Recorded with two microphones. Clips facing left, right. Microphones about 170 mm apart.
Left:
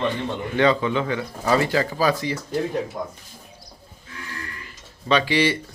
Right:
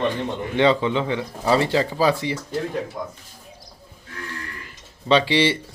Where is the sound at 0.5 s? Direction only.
25° right (ahead or behind).